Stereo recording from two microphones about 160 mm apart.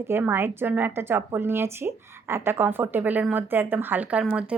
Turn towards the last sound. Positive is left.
turn(degrees=-5)  # may be behind; listen again after turning